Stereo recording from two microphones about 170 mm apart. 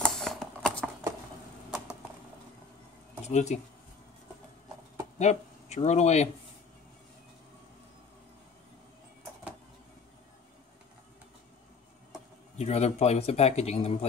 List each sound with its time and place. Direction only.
0.0 s a sound: centre (ahead or behind)
3.3 s speech: 40° left (ahead or behind)
5.2 s speech: 40° left (ahead or behind)
12.5 s a man's voice: 40° left (ahead or behind)